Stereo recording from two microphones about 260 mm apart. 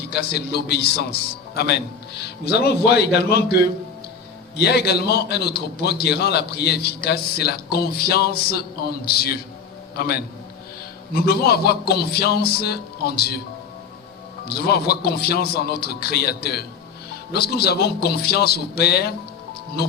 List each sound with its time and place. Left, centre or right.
0.1 s a man's voice: left
14.4 s a man's voice: left